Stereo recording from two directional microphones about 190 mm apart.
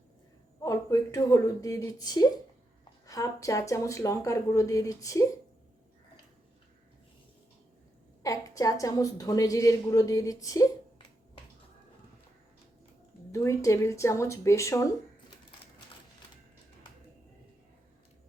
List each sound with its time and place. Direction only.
0.6 s a woman's voice: 15° left (ahead or behind)
8.2 s a woman's voice: 20° left (ahead or behind)
13.3 s a woman's voice: 15° left (ahead or behind)